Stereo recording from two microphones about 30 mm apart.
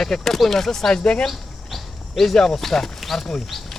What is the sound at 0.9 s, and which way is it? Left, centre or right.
Speech, left.